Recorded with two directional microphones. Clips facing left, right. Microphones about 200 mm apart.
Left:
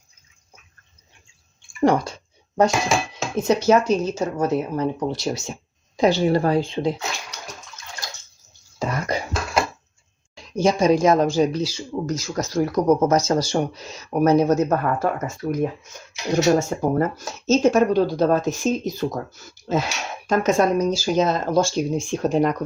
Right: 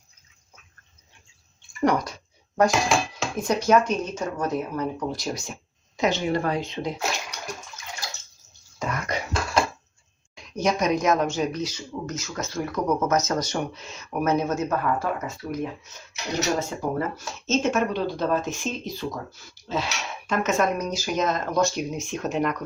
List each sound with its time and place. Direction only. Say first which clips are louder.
1.8 s speech: left 4 dB; 30° left (ahead or behind)
2.6 s speech: left 1 dB; centre (ahead or behind)
3.3 s speech: left 3 dB; 25° left (ahead or behind)
8.8 s beatboxing: left 4 dB; 30° left (ahead or behind)
10.3 s speech: left 5 dB; 30° left (ahead or behind)